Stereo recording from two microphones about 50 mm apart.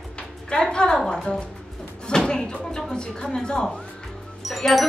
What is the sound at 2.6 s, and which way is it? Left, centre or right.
A woman's voice, centre.